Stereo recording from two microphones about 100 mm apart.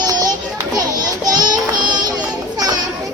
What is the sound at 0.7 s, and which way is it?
Children playing, 40° right (ahead or behind).